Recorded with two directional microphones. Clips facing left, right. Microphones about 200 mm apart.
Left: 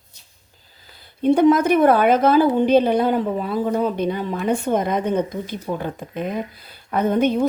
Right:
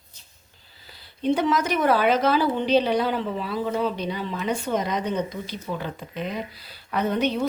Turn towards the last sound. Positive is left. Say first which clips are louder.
# left 5 dB
turn(degrees=50)  # may be behind; listen again after turning